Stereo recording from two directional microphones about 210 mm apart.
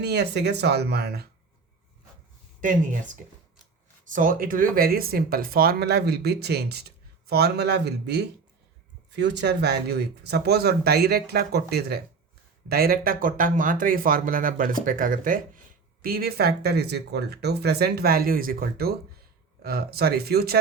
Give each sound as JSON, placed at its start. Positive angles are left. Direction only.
{"t": 0.0, "sound": "speech", "side_deg": -50}
{"t": 2.6, "sound": "speech", "side_deg": -40}
{"t": 4.1, "sound": "speech", "side_deg": -40}